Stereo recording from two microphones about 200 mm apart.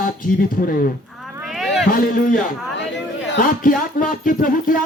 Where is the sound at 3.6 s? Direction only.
45° left (ahead or behind).